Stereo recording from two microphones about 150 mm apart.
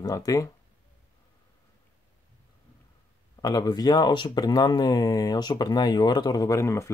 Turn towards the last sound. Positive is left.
turn(degrees=20)  # may be behind; listen again after turning